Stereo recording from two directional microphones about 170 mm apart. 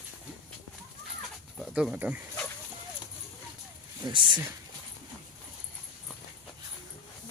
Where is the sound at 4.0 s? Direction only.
30° right (ahead or behind).